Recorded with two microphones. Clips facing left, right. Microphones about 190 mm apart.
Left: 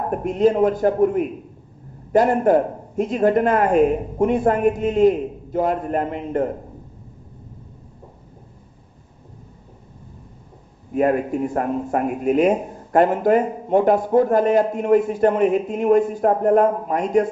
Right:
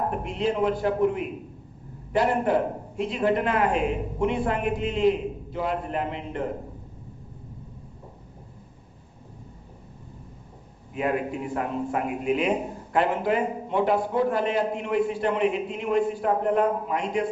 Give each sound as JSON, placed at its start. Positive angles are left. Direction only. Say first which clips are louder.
{"t": 0.1, "sound": "a man's voice", "louder": "left 9 dB", "side_deg": 45}
{"t": 10.9, "sound": "a man's voice", "louder": "left 8 dB", "side_deg": 45}